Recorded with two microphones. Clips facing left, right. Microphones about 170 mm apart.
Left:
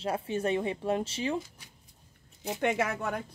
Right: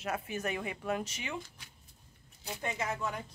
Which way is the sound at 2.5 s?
75° left (ahead or behind).